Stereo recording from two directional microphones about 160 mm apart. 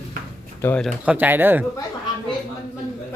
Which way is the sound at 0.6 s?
15° left (ahead or behind).